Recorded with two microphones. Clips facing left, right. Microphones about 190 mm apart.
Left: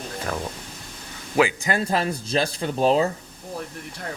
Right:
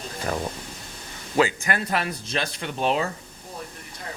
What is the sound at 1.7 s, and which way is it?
Speech, 30° left (ahead or behind).